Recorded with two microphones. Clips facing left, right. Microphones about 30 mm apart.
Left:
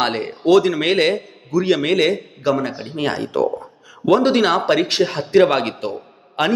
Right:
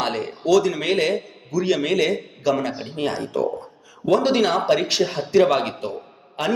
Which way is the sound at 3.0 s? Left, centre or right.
Left.